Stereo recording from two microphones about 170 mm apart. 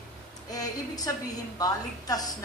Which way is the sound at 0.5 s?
20° left (ahead or behind).